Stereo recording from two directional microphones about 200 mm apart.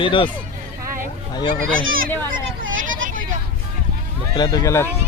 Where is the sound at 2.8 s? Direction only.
40° right (ahead or behind).